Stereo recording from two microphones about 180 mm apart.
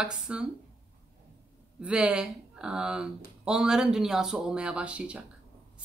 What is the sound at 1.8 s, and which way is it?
Speech, 5° right (ahead or behind).